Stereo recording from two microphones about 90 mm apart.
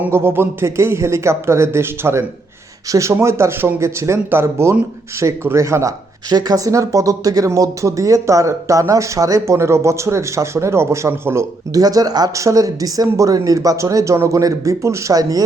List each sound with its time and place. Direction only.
0.0 s speech: 25° right (ahead or behind)
11.7 s speech: 45° right (ahead or behind)